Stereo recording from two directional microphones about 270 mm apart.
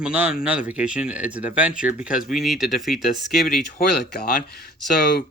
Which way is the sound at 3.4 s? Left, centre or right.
Left.